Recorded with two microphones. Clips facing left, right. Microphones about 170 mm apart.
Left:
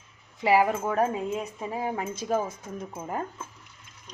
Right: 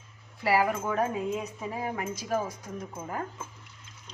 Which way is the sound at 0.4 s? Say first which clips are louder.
Left 4 dB; 20° left (ahead or behind).